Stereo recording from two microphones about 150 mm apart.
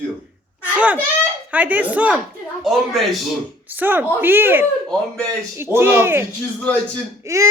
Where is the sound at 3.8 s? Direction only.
15° right (ahead or behind).